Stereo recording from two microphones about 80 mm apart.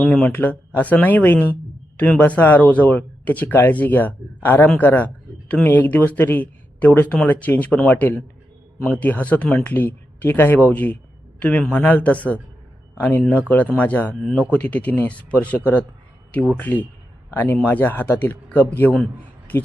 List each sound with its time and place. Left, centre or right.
0.0 s a man's voice: centre
14.2 s speech: centre
14.6 s speech: centre